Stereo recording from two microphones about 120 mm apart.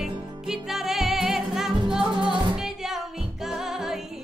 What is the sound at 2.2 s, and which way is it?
Music, 45° right (ahead or behind).